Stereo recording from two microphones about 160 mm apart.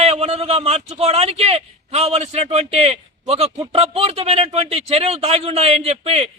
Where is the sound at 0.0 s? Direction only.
40° right (ahead or behind).